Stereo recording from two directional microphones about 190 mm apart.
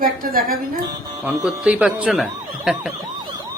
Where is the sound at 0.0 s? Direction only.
50° right (ahead or behind).